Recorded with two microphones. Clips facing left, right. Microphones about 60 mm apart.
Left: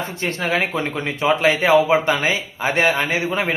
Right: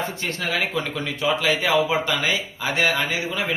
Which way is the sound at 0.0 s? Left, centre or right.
Left.